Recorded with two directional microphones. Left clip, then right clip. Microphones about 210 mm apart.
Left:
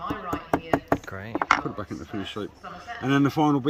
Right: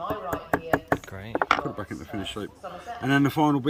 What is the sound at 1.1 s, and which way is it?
Speech, 5° right (ahead or behind).